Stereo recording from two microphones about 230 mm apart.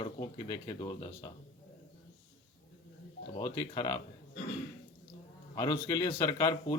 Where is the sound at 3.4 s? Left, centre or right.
Centre.